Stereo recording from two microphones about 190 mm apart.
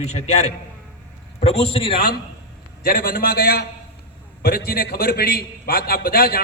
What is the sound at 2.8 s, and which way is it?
A man's voice, 50° left (ahead or behind).